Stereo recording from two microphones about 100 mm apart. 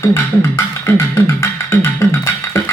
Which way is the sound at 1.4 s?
25° left (ahead or behind).